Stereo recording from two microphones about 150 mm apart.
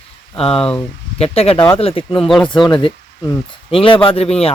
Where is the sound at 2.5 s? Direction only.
30° left (ahead or behind).